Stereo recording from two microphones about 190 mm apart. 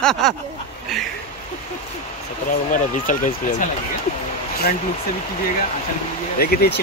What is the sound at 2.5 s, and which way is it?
Speech, 45° left (ahead or behind).